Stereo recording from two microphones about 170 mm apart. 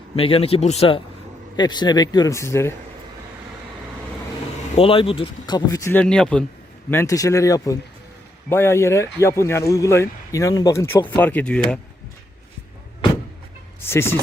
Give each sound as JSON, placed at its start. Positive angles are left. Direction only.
{"t": 0.2, "sound": "speech", "side_deg": 35}
{"t": 4.7, "sound": "speech", "side_deg": 35}
{"t": 6.9, "sound": "speech", "side_deg": 15}
{"t": 13.8, "sound": "speech", "side_deg": 15}